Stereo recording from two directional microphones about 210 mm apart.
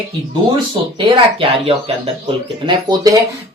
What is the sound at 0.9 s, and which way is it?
Speech, 25° right (ahead or behind).